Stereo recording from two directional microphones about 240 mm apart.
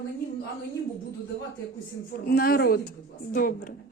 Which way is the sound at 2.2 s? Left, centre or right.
Left.